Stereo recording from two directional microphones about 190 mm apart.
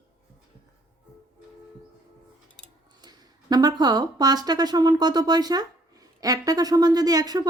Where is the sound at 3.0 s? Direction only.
20° right (ahead or behind).